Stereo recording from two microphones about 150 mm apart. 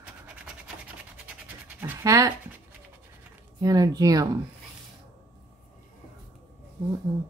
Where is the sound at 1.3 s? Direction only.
10° right (ahead or behind).